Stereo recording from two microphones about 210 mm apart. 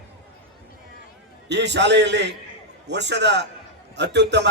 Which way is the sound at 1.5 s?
55° right (ahead or behind).